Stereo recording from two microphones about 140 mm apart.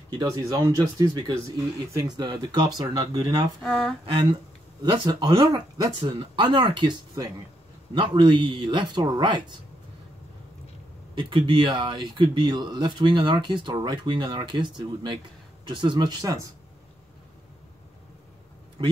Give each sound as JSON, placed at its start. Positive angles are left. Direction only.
{"t": 0.2, "sound": "speech", "side_deg": -25}
{"t": 3.6, "sound": "speech", "side_deg": 5}
{"t": 4.0, "sound": "speech", "side_deg": -35}
{"t": 11.1, "sound": "speech", "side_deg": -35}